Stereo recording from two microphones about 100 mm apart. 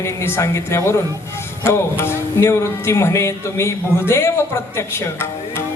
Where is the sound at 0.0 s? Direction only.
25° left (ahead or behind).